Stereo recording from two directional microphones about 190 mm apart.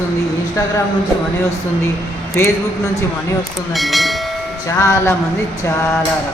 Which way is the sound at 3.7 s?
Centre (ahead or behind).